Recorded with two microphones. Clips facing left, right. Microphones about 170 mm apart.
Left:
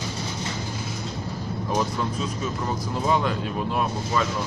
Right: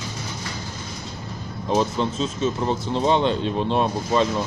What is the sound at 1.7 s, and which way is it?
Speech, 25° right (ahead or behind).